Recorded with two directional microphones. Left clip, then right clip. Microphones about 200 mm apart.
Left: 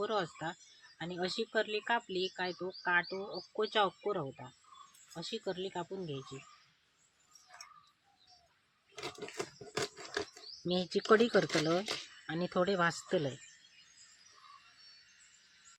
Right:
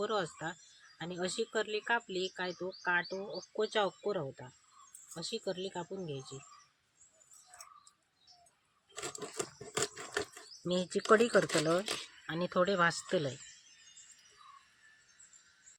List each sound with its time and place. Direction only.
0.0 s speech: 10° left (ahead or behind)
9.0 s a sound: 5° right (ahead or behind)
10.7 s speech: 20° left (ahead or behind)